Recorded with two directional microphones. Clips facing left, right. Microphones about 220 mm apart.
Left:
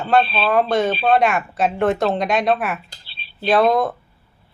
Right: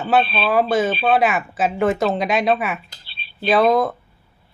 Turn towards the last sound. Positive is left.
turn(degrees=0)  # may be behind; listen again after turning